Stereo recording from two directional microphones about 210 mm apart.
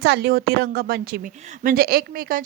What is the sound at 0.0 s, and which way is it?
A woman's voice, 50° right (ahead or behind).